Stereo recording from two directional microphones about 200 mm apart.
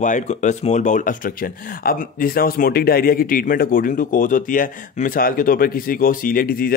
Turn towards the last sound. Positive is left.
turn(degrees=45)  # may be behind; listen again after turning